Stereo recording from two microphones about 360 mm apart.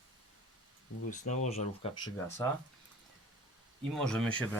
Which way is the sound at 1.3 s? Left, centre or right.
Centre.